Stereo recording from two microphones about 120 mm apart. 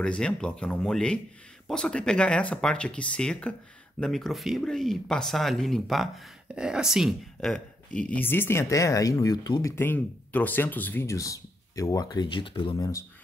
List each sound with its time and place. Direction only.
0.0 s speech: 5° left (ahead or behind); by 12.7 s 45° left (ahead or behind)
12.7 s speech: 30° left (ahead or behind)